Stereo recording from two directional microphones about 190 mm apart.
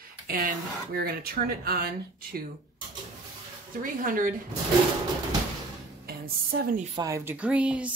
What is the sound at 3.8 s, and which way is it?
Speech, 45° right (ahead or behind).